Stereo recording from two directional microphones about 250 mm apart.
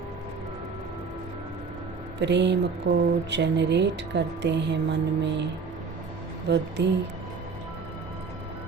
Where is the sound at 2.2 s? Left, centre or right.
Right.